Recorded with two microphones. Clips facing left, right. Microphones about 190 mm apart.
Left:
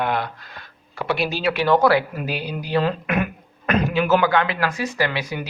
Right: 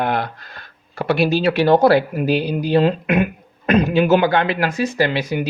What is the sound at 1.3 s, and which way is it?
A man's voice, 30° right (ahead or behind).